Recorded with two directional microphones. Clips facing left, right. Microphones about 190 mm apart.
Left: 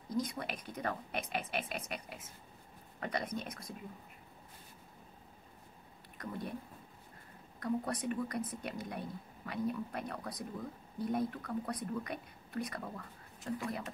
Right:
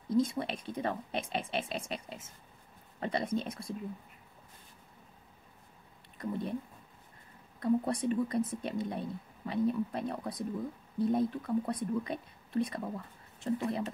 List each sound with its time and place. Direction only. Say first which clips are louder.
0.1 s speech: right 7 dB; 25° right (ahead or behind)
7.6 s speech: right 6 dB; 25° right (ahead or behind)